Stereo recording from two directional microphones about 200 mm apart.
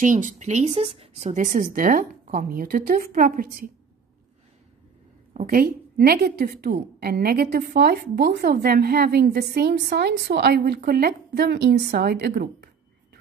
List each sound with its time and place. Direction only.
0.0 s a woman's voice: 40° right (ahead or behind)
5.3 s a woman's voice: 40° right (ahead or behind); by 12.6 s 55° right (ahead or behind)